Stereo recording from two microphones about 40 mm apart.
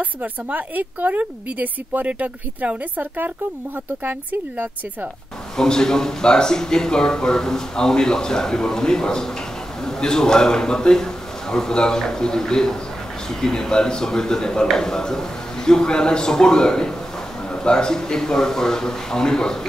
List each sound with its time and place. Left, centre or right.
0.0 s a woman's voice: right
4.0 s a woman's voice: right
5.6 s speech: centre